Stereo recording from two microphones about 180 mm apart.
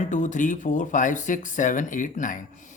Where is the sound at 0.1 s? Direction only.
45° left (ahead or behind).